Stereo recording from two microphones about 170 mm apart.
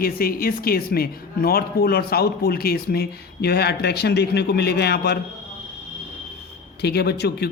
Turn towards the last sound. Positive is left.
turn(degrees=70)  # may be behind; listen again after turning